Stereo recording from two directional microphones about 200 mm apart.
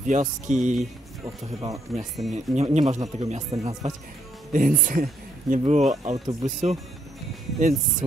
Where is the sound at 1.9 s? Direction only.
Centre (ahead or behind).